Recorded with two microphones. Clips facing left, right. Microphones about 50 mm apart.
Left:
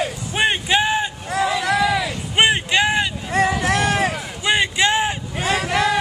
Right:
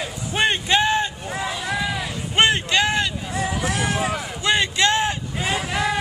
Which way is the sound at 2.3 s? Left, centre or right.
Centre.